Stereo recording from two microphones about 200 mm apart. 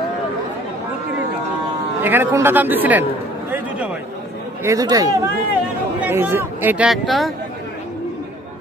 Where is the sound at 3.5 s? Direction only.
5° right (ahead or behind).